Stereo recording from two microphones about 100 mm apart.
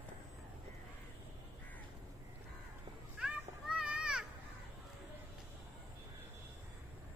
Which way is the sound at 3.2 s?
10° right (ahead or behind).